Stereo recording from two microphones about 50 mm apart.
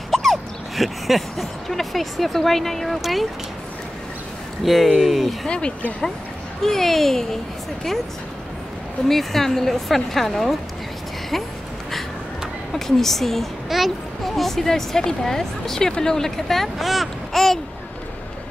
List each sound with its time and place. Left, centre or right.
0.1 s speech: centre
4.6 s speech: centre
5.5 s speech: centre
6.6 s a child's voice: centre
9.0 s speech: centre
12.7 s a child's voice: centre